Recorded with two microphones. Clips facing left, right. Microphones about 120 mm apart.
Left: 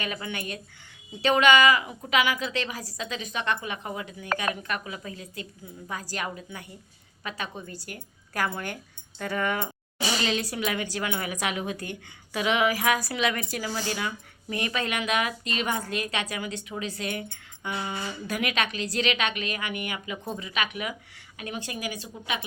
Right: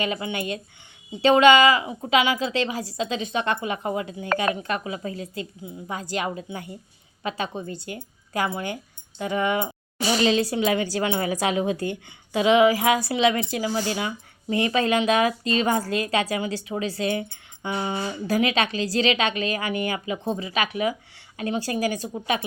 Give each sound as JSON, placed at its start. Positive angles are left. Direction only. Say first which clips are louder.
{"t": 0.0, "sound": "a woman's voice", "louder": "right 6 dB", "side_deg": -25}